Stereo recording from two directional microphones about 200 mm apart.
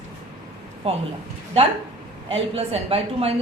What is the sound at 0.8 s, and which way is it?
Speech, 30° right (ahead or behind).